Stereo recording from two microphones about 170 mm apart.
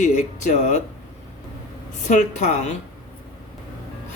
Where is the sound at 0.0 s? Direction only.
45° left (ahead or behind).